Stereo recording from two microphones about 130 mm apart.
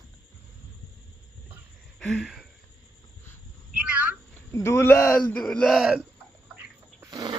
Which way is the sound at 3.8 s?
10° right (ahead or behind).